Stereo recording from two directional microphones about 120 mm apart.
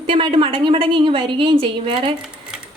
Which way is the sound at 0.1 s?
45° right (ahead or behind).